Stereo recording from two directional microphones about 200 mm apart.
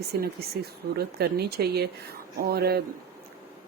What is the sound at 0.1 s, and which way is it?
A woman's voice, 50° right (ahead or behind).